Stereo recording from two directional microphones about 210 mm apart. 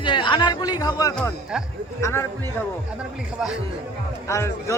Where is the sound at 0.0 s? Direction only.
25° left (ahead or behind).